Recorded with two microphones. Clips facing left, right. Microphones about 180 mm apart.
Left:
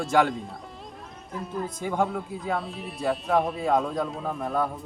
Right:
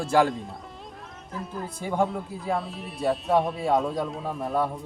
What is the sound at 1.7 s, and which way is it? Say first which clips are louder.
Speech: right 2 dB; 5° right (ahead or behind).